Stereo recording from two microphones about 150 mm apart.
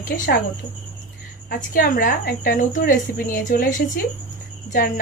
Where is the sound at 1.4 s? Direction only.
70° left (ahead or behind).